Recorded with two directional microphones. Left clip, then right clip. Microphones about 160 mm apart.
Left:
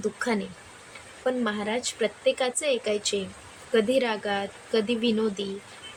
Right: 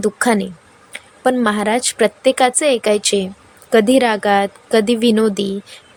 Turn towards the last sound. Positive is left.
turn(degrees=-55)  # may be behind; listen again after turning